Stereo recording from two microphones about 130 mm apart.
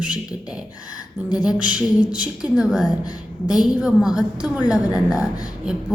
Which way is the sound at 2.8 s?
30° left (ahead or behind).